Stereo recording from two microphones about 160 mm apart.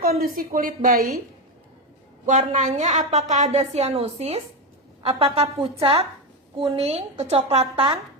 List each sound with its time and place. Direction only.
0.0 s a woman's voice: 70° right (ahead or behind)
2.2 s a woman's voice: 50° right (ahead or behind)